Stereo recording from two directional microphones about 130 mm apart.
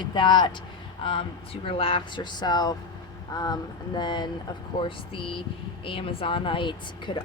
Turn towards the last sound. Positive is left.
turn(degrees=40)  # may be behind; listen again after turning